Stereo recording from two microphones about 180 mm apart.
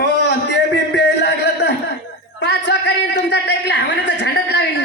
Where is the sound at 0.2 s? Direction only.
70° left (ahead or behind).